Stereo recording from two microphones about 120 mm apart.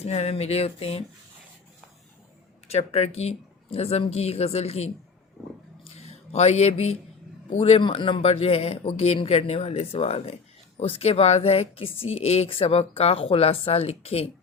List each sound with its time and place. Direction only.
0.0 s a woman's voice: 60° left (ahead or behind)
2.6 s a woman's voice: 60° left (ahead or behind)
5.8 s a sound: 60° left (ahead or behind)
7.6 s a woman's voice: 50° left (ahead or behind)